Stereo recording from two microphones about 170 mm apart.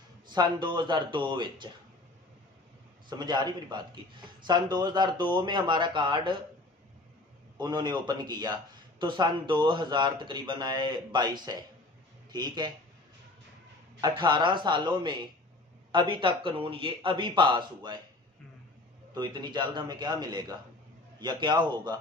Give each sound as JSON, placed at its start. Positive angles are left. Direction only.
{"t": 0.3, "sound": "speech", "side_deg": -25}
{"t": 3.1, "sound": "speech", "side_deg": -25}
{"t": 7.5, "sound": "speech", "side_deg": -25}
{"t": 14.0, "sound": "speech", "side_deg": -25}
{"t": 19.1, "sound": "speech", "side_deg": -25}